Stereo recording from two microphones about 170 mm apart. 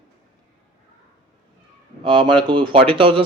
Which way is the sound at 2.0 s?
30° right (ahead or behind).